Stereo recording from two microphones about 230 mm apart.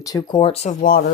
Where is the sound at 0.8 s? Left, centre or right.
Left.